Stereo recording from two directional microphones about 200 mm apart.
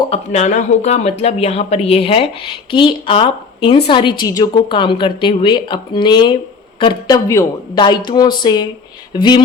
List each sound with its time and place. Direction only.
0.1 s speech: 35° left (ahead or behind)